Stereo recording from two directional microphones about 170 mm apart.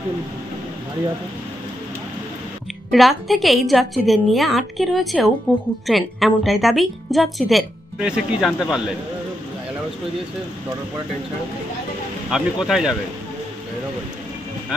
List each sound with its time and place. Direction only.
2.9 s a woman's voice: centre (ahead or behind)
12.3 s a woman's voice: 5° right (ahead or behind)